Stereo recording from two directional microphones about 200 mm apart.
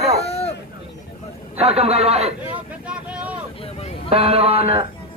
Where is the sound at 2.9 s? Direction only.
5° right (ahead or behind).